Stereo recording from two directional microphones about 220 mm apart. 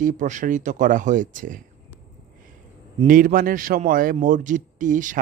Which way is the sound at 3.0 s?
40° right (ahead or behind).